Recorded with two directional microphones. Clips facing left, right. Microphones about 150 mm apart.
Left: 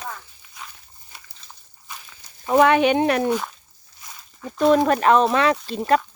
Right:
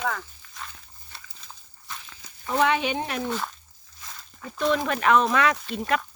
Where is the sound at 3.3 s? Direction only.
10° left (ahead or behind).